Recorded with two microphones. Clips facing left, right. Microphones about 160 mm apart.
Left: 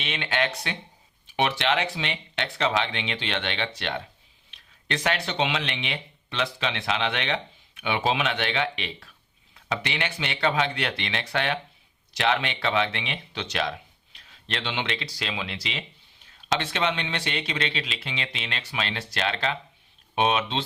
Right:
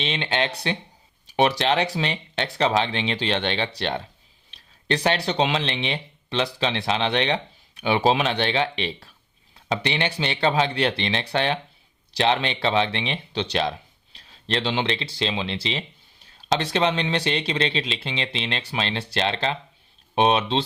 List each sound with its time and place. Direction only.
0.0 s speech: 30° right (ahead or behind)